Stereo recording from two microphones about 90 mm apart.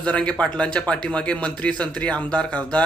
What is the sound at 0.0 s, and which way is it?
Speech, 10° left (ahead or behind).